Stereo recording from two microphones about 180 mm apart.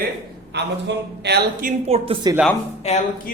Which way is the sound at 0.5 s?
70° right (ahead or behind).